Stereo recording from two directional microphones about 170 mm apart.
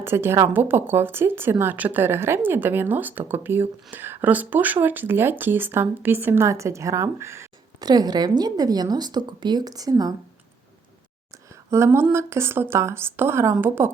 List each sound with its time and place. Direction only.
0.0 s speech: 15° right (ahead or behind)
11.7 s speech: 15° right (ahead or behind)